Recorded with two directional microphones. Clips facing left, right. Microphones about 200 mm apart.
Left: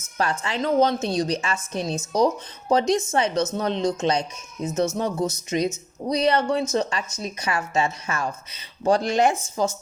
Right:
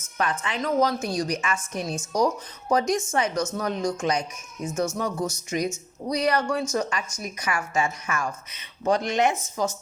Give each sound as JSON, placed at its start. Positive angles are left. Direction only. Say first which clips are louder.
{"t": 0.2, "sound": "a woman's voice", "louder": "left 2 dB", "side_deg": 30}